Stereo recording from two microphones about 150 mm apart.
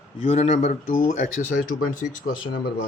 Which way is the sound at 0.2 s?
45° left (ahead or behind).